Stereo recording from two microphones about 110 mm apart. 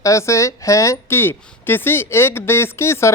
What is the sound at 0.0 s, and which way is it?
Speech, 30° left (ahead or behind).